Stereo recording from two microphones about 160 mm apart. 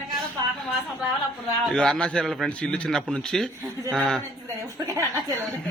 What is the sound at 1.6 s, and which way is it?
A man's voice, 5° left (ahead or behind).